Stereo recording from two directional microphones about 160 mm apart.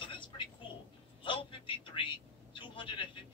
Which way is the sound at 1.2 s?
30° left (ahead or behind).